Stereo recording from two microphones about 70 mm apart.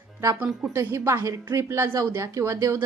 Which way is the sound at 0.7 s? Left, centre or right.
Right.